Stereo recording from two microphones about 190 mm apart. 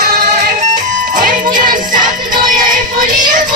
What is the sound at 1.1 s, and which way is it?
Music, 45° right (ahead or behind).